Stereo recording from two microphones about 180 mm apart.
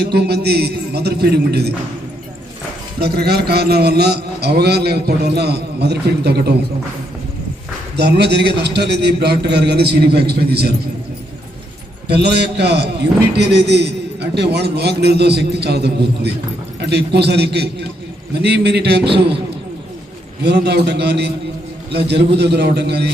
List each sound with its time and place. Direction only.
0.0 s a man's voice: 65° right (ahead or behind)
3.0 s a man's voice: 60° right (ahead or behind)
7.9 s a man's voice: 65° right (ahead or behind)
12.0 s a man's voice: 65° right (ahead or behind)
20.4 s a man's voice: 70° right (ahead or behind)